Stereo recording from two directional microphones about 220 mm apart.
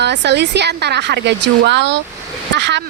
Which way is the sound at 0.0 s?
50° right (ahead or behind).